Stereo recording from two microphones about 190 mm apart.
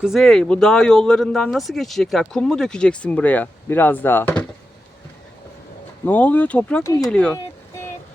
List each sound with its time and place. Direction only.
0.0 s speech: centre (ahead or behind)
6.1 s speech: 10° left (ahead or behind)
6.8 s speech: 15° left (ahead or behind)
7.1 s speech: 5° left (ahead or behind)